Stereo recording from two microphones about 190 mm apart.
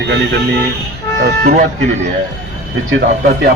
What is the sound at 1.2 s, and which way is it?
Speech, 50° right (ahead or behind).